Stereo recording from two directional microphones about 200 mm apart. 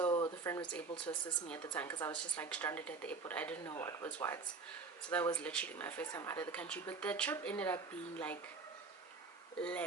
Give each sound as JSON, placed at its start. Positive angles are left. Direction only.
{"t": 0.0, "sound": "a sound", "side_deg": 15}
{"t": 0.7, "sound": "a woman's voice", "side_deg": 5}
{"t": 9.6, "sound": "speech", "side_deg": 5}